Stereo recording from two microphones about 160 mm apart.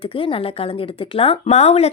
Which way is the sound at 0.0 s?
35° left (ahead or behind).